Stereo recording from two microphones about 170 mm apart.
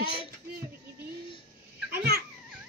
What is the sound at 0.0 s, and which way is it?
Speech, 30° left (ahead or behind).